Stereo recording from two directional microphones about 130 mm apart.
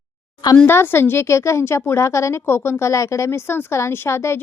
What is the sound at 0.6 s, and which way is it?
A woman's voice, 15° left (ahead or behind).